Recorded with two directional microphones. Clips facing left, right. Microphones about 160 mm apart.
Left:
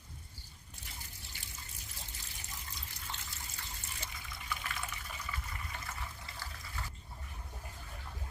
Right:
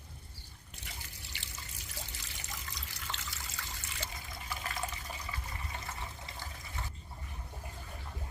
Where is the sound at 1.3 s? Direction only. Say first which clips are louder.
Right 4 dB; 80° right.